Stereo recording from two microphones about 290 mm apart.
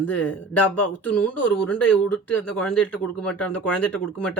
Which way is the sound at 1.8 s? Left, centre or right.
Left.